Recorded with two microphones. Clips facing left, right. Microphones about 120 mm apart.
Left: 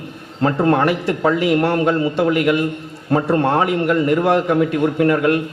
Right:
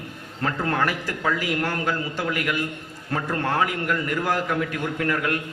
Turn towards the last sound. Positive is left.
turn(degrees=25)  # may be behind; listen again after turning